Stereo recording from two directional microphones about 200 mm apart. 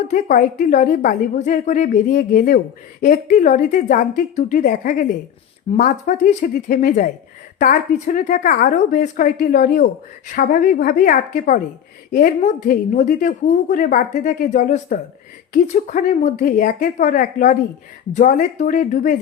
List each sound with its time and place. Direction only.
0.1 s a woman's voice: 40° left (ahead or behind)